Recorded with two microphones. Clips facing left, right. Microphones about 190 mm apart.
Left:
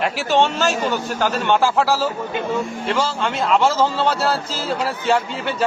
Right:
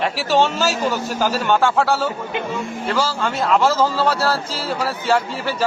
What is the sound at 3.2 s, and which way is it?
A man's voice, centre (ahead or behind).